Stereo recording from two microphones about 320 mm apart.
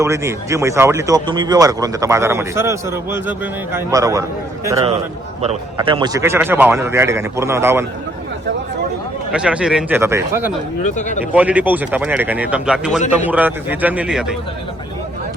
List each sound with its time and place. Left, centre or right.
0.0 s speech: centre
9.3 s speech: centre
10.8 s speech: left
11.3 s speech: centre